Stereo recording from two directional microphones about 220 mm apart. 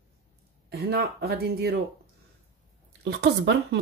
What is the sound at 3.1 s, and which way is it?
Speech, 50° right (ahead or behind).